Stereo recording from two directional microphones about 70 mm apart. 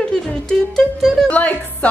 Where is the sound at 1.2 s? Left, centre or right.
Left.